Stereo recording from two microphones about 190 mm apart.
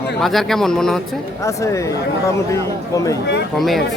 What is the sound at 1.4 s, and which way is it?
Speech, 15° left (ahead or behind).